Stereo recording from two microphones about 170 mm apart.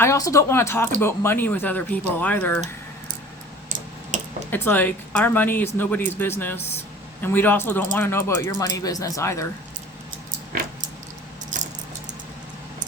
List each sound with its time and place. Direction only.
0.0 s speech: 20° left (ahead or behind)
4.1 s a sound: 45° right (ahead or behind)
4.5 s speech: 10° left (ahead or behind)
11.5 s keys jangling: 50° right (ahead or behind)